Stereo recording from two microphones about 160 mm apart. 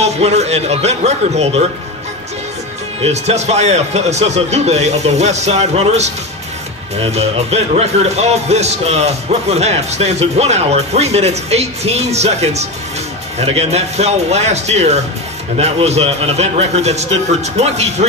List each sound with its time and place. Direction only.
0.0 s a man's voice: 45° right (ahead or behind)
3.0 s a man's voice: 45° right (ahead or behind)